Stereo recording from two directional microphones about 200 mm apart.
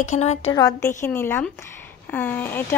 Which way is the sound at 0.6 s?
15° left (ahead or behind).